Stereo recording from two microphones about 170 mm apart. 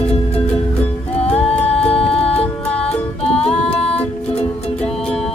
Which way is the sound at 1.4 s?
10° left (ahead or behind).